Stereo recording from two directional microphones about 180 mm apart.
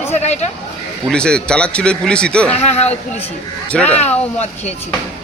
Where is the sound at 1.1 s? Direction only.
5° left (ahead or behind).